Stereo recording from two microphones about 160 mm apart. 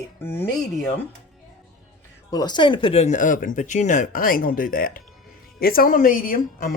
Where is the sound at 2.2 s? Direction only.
25° left (ahead or behind).